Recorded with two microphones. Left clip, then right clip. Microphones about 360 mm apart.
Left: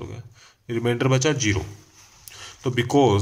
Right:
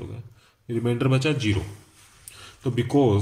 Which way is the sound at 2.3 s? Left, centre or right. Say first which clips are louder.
Left 3 dB; centre.